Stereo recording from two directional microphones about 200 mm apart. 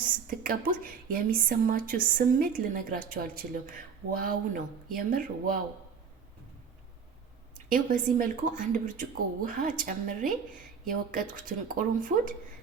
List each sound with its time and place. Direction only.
0.0 s a sound: 45° right (ahead or behind)
1.1 s a woman's voice: 45° right (ahead or behind)
7.7 s a woman's voice: 40° right (ahead or behind)